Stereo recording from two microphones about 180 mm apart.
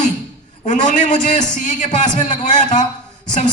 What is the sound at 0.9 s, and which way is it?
A man's voice, 45° left (ahead or behind).